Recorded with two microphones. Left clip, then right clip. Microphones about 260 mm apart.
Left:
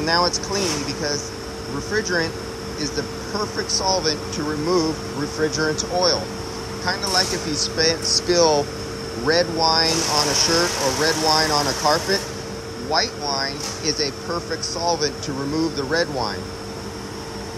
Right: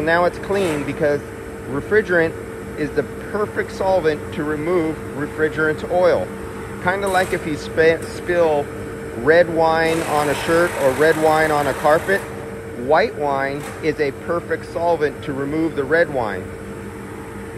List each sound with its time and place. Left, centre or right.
0.0 s speech: centre
3.3 s speech: centre
13.2 s speech: centre